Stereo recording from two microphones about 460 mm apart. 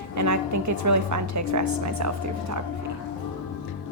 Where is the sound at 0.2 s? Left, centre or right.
Right.